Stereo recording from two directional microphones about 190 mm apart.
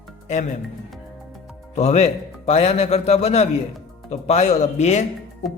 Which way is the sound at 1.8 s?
35° left (ahead or behind).